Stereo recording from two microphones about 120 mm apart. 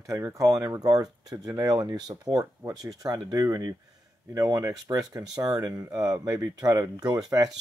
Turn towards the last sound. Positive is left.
turn(degrees=-30)  # may be behind; listen again after turning